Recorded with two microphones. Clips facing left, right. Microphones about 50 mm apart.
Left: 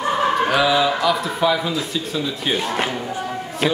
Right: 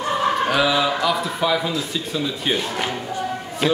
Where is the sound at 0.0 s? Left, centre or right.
Centre.